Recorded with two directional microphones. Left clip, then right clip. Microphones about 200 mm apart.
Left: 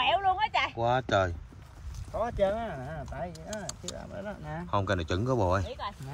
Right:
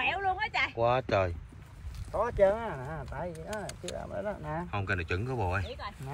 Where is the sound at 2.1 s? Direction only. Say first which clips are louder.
Right 2 dB; centre (ahead or behind).